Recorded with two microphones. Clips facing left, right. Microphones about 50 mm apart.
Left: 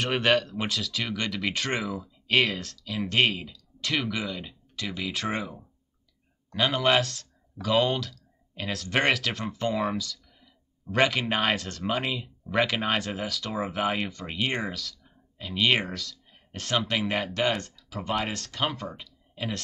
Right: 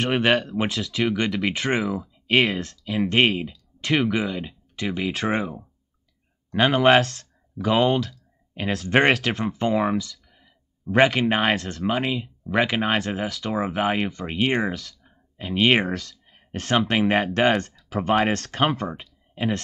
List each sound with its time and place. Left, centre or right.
0.0 s speech: centre
0.7 s speech: centre
1.1 s speech: right
2.8 s speech: right
5.4 s speech: centre
6.5 s speech: right
9.9 s a sound: centre
11.1 s speech: right
11.5 s speech: centre
12.9 s speech: centre
13.8 s speech: right
14.9 s a sound: right
15.5 s speech: right
18.9 s a sound: right